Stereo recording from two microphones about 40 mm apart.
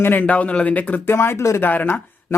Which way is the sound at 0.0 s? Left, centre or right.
Left.